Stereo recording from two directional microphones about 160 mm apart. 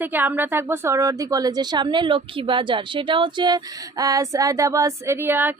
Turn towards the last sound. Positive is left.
turn(degrees=-15)  # may be behind; listen again after turning